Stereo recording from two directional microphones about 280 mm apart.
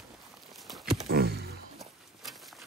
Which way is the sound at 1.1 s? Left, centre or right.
Right.